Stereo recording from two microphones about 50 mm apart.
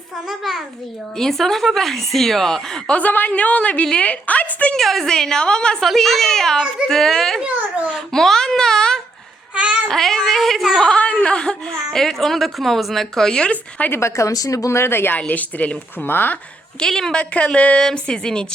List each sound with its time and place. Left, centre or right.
0.3 s a woman's voice: centre
3.0 s a woman's voice: left
3.9 s a sound: left
4.7 s a woman's voice: centre
5.8 s a woman's voice: centre
9.6 s a sound: right
9.9 s a woman's voice: centre
10.9 s a woman's voice: centre
11.9 s a woman's voice: centre
13.5 s a woman's voice: left
13.9 s a woman's voice: left
15.3 s speech: left
16.0 s speech: left
16.8 s a woman's voice: centre